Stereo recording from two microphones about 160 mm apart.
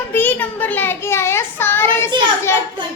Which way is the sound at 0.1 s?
10° left (ahead or behind).